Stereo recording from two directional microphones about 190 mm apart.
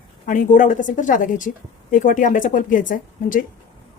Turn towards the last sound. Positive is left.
turn(degrees=45)  # may be behind; listen again after turning